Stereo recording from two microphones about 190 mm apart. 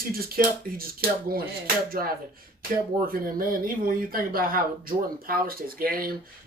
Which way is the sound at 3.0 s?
50° right (ahead or behind).